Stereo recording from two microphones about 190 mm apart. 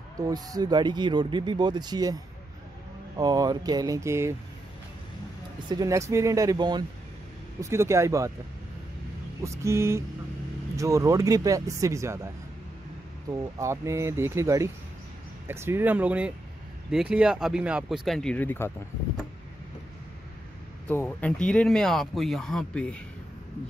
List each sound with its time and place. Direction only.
0.2 s speech: 20° right (ahead or behind)
3.2 s speech: 20° right (ahead or behind)
5.7 s speech: 20° right (ahead or behind)
9.4 s speech: 15° right (ahead or behind)
13.3 s speech: 15° right (ahead or behind); by 18.7 s 10° left (ahead or behind)
20.9 s speech: 10° left (ahead or behind)